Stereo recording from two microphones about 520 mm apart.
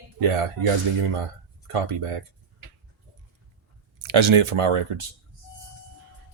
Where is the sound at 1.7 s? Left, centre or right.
Right.